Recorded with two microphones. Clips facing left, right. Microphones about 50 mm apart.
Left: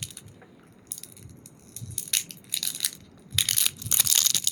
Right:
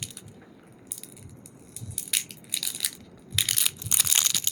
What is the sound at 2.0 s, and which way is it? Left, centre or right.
Crushing, centre.